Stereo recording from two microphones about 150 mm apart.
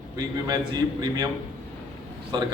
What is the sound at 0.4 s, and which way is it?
Speech, 25° right (ahead or behind).